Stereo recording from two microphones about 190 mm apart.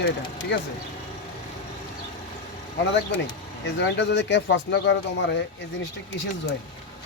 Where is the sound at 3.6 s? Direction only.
65° left (ahead or behind).